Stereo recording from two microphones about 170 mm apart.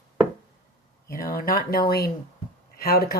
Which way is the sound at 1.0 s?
60° left (ahead or behind).